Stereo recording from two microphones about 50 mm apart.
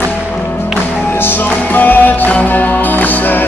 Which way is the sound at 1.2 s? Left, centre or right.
Left.